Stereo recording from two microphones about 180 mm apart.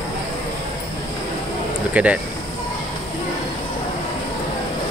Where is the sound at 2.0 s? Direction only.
10° right (ahead or behind).